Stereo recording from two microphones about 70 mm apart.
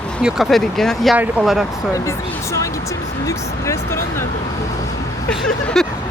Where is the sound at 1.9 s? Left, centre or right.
Left.